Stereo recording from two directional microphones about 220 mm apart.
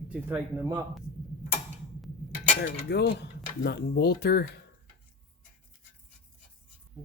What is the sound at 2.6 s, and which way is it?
Speech, 50° left (ahead or behind).